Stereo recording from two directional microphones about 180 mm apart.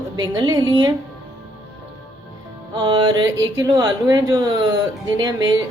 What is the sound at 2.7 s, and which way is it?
A woman's voice, 25° right (ahead or behind).